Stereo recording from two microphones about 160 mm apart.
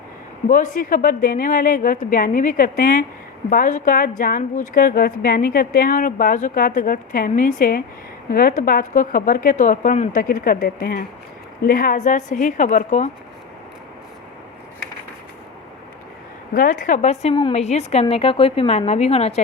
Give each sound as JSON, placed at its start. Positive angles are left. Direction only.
{"t": 0.4, "sound": "a woman's voice", "side_deg": 55}
{"t": 16.6, "sound": "a woman's voice", "side_deg": 55}